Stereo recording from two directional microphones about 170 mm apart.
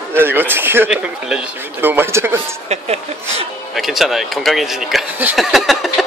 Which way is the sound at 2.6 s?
40° right (ahead or behind).